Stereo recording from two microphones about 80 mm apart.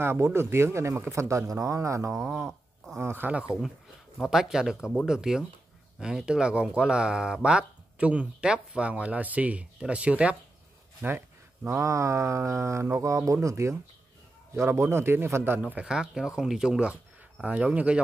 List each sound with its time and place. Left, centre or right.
0.0 s speech: right
4.2 s speech: centre
11.1 s speech: right
15.6 s speech: centre